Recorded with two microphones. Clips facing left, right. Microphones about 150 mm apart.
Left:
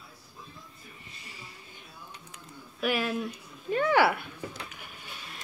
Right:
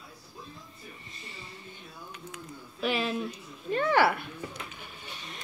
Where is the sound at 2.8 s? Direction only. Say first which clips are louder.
Left 1 dB; 10° left (ahead or behind).